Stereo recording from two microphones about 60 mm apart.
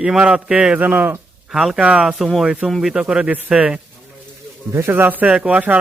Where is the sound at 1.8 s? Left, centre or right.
Centre.